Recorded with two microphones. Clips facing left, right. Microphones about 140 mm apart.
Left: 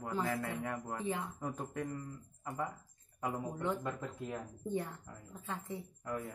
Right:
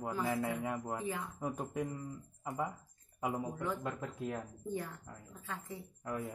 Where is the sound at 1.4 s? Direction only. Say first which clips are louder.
Right 2 dB; 15° right (ahead or behind).